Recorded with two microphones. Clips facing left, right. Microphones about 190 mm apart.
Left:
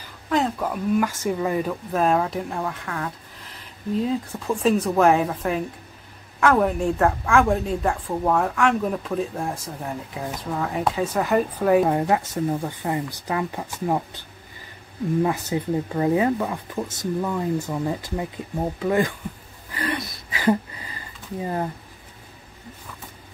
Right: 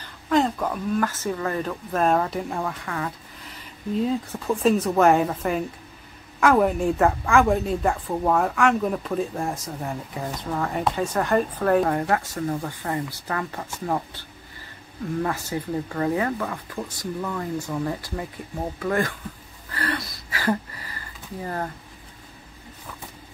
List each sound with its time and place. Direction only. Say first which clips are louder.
0.3 s a woman's voice: right 1 dB; 5° left (ahead or behind)
12.0 s speech: left 2 dB; 20° left (ahead or behind)
15.2 s speech: left 4 dB; 20° left (ahead or behind)
19.7 s a sound: left 1 dB; 15° left (ahead or behind)